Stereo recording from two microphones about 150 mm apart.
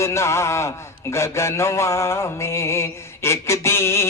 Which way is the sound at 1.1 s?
20° left (ahead or behind).